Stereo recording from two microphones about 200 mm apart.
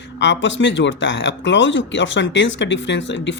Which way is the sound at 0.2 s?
65° left (ahead or behind).